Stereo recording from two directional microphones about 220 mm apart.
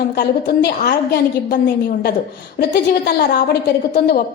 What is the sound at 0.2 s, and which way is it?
A woman's voice, 45° left (ahead or behind).